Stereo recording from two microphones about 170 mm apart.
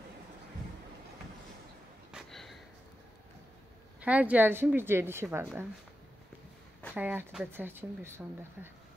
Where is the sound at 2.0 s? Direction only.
Centre (ahead or behind).